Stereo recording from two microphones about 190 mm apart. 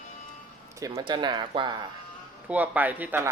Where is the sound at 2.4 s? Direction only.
5° right (ahead or behind).